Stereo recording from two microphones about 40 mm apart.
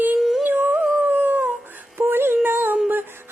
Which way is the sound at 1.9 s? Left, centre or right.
Right.